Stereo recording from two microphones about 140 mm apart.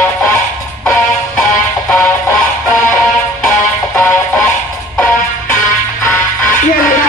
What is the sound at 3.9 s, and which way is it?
Music, 15° left (ahead or behind).